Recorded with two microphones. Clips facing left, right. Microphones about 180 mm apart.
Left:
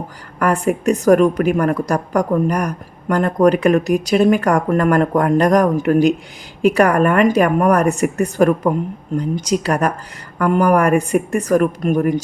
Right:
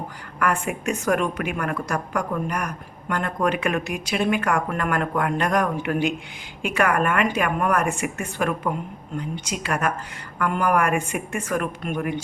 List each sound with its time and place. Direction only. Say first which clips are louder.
0.3 s a woman's voice: left 7 dB; 35° left (ahead or behind)